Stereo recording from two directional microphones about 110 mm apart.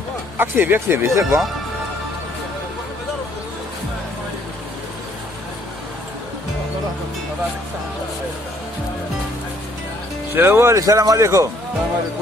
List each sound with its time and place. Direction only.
0.4 s speech: 20° right (ahead or behind)
10.3 s speech: 20° right (ahead or behind)